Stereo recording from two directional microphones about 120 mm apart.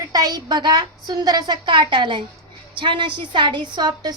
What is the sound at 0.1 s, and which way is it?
A woman's voice, 35° right (ahead or behind).